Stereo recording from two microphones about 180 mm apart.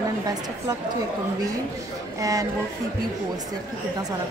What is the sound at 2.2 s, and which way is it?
Speech, 20° right (ahead or behind).